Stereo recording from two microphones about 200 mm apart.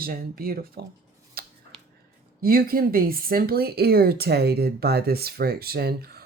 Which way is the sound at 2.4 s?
45° right (ahead or behind).